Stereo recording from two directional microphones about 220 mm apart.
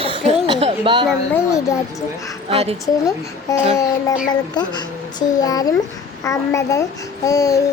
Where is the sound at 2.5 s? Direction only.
25° right (ahead or behind).